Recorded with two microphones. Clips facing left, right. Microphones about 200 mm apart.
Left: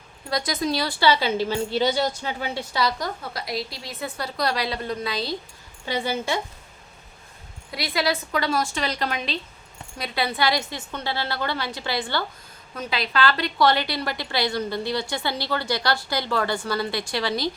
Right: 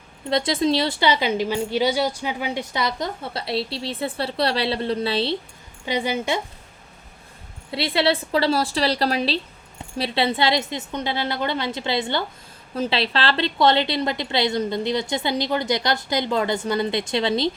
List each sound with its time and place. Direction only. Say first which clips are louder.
0.3 s a woman's voice: right 5 dB; 25° right (ahead or behind)
5.8 s a woman's voice: right 2 dB; 15° right (ahead or behind)
7.7 s a woman's voice: right 4 dB; 30° right (ahead or behind)